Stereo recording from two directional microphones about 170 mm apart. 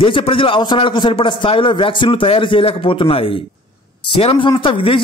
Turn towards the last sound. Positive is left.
turn(degrees=30)  # may be behind; listen again after turning